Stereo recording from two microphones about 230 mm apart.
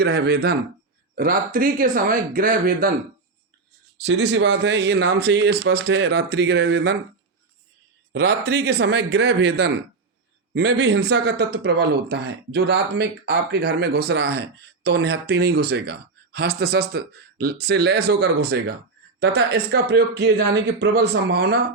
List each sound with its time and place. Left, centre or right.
0.0 s speech: right
3.9 s speech: right
8.1 s speech: right